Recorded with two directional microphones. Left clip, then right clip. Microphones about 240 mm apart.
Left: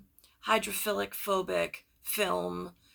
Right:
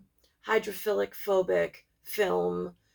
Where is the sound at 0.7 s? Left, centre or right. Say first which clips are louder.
Right 3 dB; centre.